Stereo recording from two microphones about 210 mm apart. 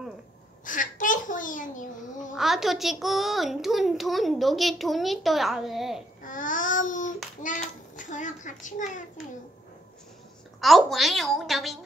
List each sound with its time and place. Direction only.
0.7 s a child's voice: 40° left (ahead or behind)
2.3 s a child's voice: centre (ahead or behind)
6.2 s child singing: 40° left (ahead or behind)
7.4 s a child's voice: 35° left (ahead or behind)
10.6 s a child's voice: centre (ahead or behind)